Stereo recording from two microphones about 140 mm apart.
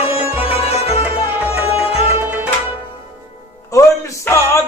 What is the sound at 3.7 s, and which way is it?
Music, 20° left (ahead or behind).